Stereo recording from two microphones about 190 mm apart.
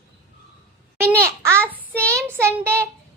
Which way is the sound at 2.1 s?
10° right (ahead or behind).